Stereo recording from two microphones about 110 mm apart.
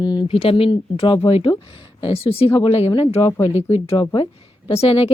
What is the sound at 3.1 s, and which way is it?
Speech, 25° left (ahead or behind).